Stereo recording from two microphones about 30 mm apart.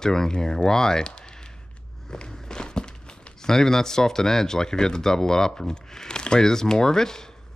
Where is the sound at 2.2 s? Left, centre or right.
Left.